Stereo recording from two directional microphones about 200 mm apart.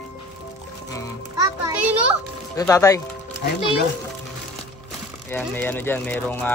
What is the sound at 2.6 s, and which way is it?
Speech, 15° left (ahead or behind).